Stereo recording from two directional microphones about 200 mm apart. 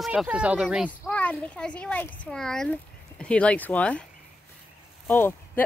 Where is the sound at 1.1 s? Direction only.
5° left (ahead or behind).